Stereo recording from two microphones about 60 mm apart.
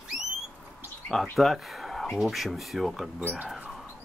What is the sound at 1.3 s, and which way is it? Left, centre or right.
Speech, centre.